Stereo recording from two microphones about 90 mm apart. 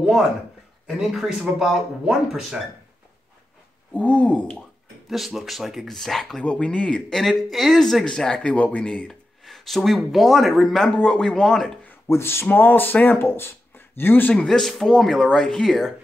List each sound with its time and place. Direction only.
0.0 s a sound: 5° right (ahead or behind)
0.8 s speech: 5° right (ahead or behind)
3.9 s speech: 15° left (ahead or behind)
5.0 s speech: centre (ahead or behind)
12.1 s speech: 25° left (ahead or behind)
14.3 s speech: 5° left (ahead or behind)